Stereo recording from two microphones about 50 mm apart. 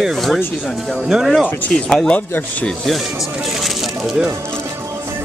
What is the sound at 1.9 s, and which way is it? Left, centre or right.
Speech, centre.